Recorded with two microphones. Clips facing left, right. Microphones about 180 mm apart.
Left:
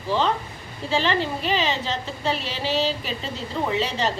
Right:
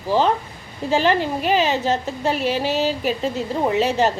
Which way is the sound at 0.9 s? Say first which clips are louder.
Right 4 dB; 50° right (ahead or behind).